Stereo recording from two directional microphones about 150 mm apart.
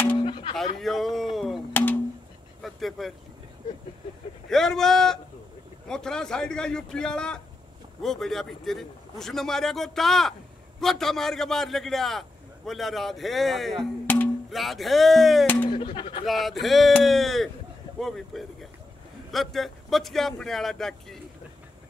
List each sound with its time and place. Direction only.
0.2 s a sound: 35° left (ahead or behind)
0.7 s a sound: centre (ahead or behind)
1.7 s a sound: 15° left (ahead or behind)
2.6 s vehicle: centre (ahead or behind)
4.5 s a man's voice: 5° left (ahead or behind)
14.0 s music: 10° left (ahead or behind)
14.5 s a man's voice: centre (ahead or behind)
15.4 s speech: 10° left (ahead or behind)
15.7 s speech: 35° left (ahead or behind)
16.3 s a man's voice: centre (ahead or behind)